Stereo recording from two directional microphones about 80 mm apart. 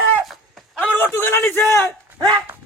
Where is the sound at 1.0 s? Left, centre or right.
Left.